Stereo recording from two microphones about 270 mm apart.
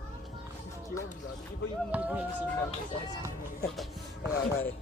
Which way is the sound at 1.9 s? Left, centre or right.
Centre.